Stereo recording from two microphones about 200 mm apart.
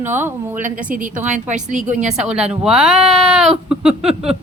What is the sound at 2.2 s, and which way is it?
A woman's voice, 5° right (ahead or behind).